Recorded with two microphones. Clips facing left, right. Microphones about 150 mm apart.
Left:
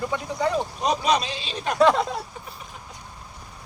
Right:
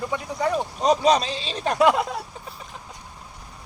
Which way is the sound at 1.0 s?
35° right (ahead or behind).